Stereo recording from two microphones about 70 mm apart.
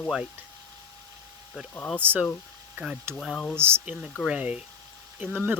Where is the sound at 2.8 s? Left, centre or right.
Right.